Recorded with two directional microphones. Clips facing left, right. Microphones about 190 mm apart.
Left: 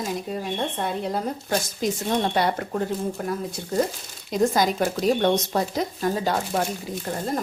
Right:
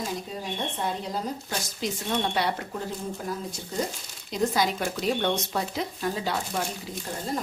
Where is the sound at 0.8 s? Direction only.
55° left (ahead or behind).